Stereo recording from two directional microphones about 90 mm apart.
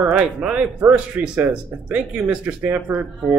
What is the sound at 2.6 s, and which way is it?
Speech, 25° right (ahead or behind).